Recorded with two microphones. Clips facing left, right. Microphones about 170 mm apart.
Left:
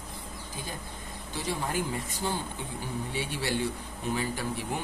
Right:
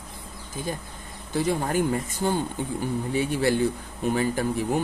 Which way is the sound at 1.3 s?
50° right (ahead or behind).